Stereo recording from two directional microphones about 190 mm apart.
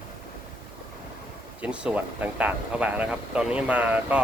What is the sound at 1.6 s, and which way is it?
Speech, 5° right (ahead or behind).